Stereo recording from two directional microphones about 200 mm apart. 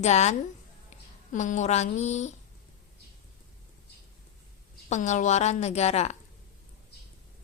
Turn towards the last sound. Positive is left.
turn(degrees=35)  # may be behind; listen again after turning